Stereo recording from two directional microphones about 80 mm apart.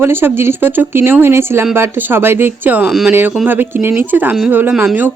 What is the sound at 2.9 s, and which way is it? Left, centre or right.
Speech, centre.